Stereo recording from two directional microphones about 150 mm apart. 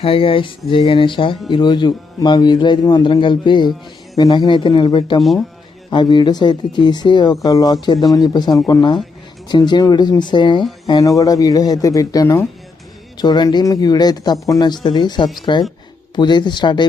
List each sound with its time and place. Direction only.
0.0 s a man's voice: 35° left (ahead or behind)
5.2 s speech: centre (ahead or behind)
5.9 s a man's voice: 30° left (ahead or behind)